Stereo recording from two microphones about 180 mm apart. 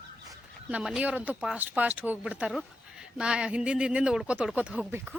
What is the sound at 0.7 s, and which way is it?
Speech, 5° right (ahead or behind).